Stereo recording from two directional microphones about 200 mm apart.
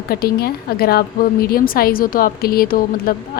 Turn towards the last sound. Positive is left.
turn(degrees=45)  # may be behind; listen again after turning